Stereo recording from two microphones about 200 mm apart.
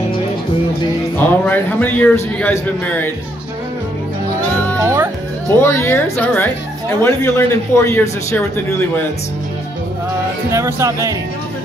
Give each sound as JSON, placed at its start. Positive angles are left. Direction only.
{"t": 1.1, "sound": "a man's voice", "side_deg": 10}
{"t": 4.7, "sound": "music", "side_deg": -10}
{"t": 5.6, "sound": "a man's voice", "side_deg": 10}
{"t": 10.5, "sound": "speech", "side_deg": -15}